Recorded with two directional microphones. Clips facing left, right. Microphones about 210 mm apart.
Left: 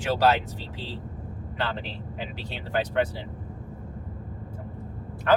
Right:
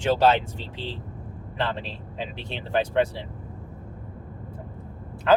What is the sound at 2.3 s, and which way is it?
Speech, 25° right (ahead or behind).